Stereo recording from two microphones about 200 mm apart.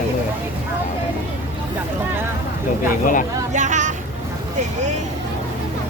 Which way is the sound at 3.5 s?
40° right (ahead or behind).